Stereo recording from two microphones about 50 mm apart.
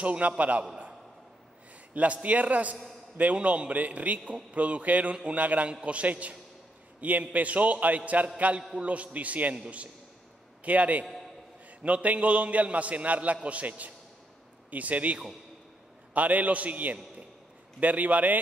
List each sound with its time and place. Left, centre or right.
0.0 s a man's voice: right
2.2 s a man's voice: right
10.6 s a man's voice: right